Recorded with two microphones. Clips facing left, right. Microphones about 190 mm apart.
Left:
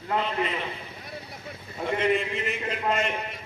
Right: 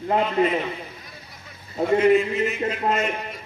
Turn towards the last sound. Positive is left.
turn(degrees=-40)  # may be behind; listen again after turning